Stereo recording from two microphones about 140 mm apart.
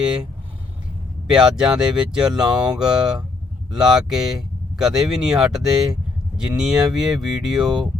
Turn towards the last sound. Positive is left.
turn(degrees=-5)  # may be behind; listen again after turning